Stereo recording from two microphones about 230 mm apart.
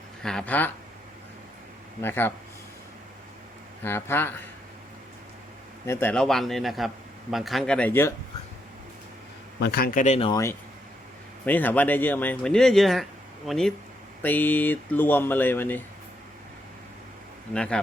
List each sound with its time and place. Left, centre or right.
0.2 s speech: centre
2.0 s speech: centre
3.8 s speech: centre
5.8 s speech: centre
9.6 s speech: left; by 10.5 s centre
11.4 s speech: centre
17.5 s speech: centre